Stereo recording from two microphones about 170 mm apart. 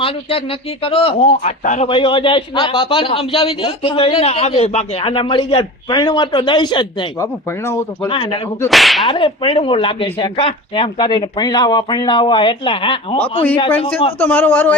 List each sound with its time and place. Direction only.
0.0 s a man's voice: 35° left (ahead or behind)
1.9 s a man's voice: 30° left (ahead or behind)
8.1 s a man's voice: 30° left (ahead or behind)
8.7 s whip: centre (ahead or behind)
9.0 s speech: 30° left (ahead or behind)
14.2 s speech: 10° left (ahead or behind)